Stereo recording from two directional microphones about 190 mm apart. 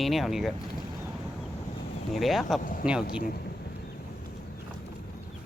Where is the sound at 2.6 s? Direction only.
45° left (ahead or behind).